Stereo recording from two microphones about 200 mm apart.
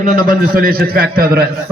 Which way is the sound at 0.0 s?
45° right (ahead or behind).